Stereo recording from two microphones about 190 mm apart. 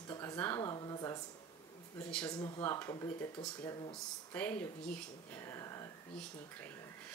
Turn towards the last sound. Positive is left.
turn(degrees=15)  # may be behind; listen again after turning